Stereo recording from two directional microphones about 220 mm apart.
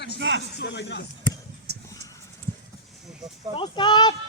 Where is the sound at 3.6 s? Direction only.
20° left (ahead or behind).